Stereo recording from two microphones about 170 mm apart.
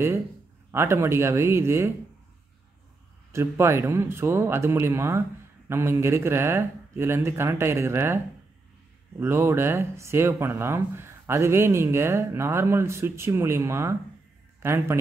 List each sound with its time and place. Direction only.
0.7 s speech: 15° right (ahead or behind)
3.3 s speech: 15° right (ahead or behind)
9.2 s a man's voice: 15° right (ahead or behind)